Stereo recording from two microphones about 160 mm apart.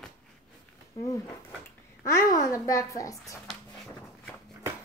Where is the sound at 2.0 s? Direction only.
20° left (ahead or behind).